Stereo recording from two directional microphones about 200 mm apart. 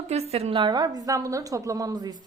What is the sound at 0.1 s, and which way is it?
A woman's voice, 30° right (ahead or behind).